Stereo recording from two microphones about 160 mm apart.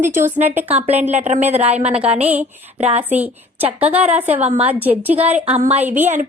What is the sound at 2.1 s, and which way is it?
Speech, 10° right (ahead or behind).